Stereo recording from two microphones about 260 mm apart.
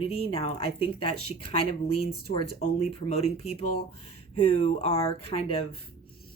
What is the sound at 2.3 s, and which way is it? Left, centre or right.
Speech, left.